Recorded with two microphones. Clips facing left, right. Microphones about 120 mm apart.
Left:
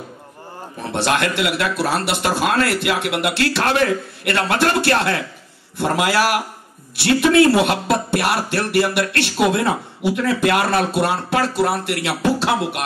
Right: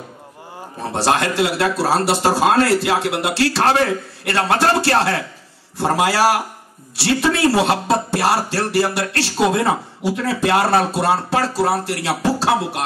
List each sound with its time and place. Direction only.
0.9 s a man's voice: 30° right (ahead or behind)